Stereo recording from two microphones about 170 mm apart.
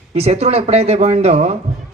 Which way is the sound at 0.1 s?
40° right (ahead or behind).